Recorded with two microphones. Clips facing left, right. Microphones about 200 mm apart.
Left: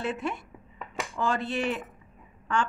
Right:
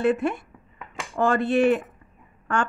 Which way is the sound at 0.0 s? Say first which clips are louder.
Right 9 dB; 55° right (ahead or behind).